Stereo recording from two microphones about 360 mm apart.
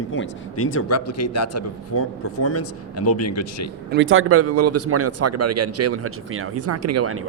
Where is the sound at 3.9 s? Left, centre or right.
Right.